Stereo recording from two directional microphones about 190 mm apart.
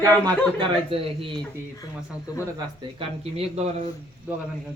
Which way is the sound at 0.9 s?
30° right (ahead or behind).